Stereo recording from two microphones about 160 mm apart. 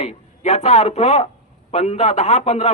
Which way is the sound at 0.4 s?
40° left (ahead or behind).